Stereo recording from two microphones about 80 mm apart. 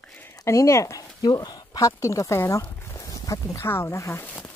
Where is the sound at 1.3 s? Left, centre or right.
Left.